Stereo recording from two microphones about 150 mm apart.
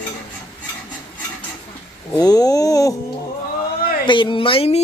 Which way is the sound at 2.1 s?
25° left (ahead or behind).